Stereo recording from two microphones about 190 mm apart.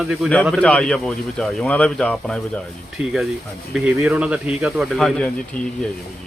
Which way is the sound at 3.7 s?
5° right (ahead or behind).